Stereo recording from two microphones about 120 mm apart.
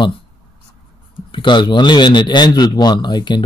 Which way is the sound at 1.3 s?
40° left (ahead or behind).